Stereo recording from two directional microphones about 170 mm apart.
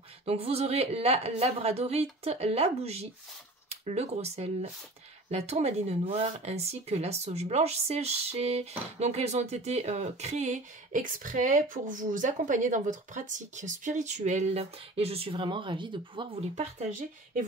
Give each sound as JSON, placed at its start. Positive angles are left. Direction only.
{"t": 0.2, "sound": "speech", "side_deg": -35}